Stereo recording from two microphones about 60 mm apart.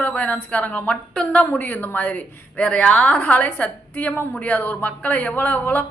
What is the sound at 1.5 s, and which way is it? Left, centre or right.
A woman's voice, left.